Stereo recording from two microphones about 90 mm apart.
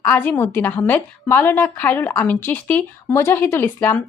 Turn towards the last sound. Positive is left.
turn(degrees=25)  # may be behind; listen again after turning